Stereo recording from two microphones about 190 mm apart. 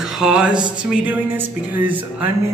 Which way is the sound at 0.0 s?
Centre (ahead or behind).